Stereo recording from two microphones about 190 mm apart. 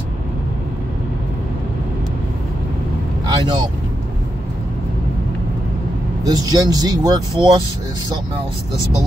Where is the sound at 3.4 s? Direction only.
20° right (ahead or behind).